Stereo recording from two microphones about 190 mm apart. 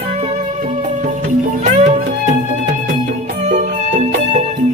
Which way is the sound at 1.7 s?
40° right (ahead or behind).